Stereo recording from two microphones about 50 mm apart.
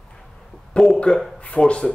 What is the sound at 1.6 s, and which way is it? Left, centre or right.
Speech, left.